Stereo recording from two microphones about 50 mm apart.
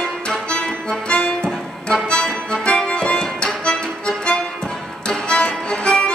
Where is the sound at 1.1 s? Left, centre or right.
Centre.